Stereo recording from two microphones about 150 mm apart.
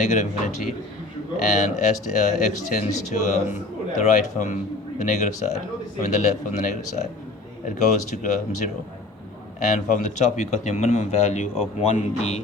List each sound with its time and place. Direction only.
0.0 s speech: 50° left (ahead or behind)